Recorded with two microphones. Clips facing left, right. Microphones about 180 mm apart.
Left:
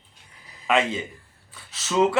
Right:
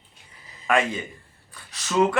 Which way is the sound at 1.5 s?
5° left (ahead or behind).